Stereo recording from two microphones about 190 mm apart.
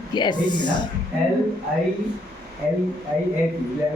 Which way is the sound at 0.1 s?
25° left (ahead or behind).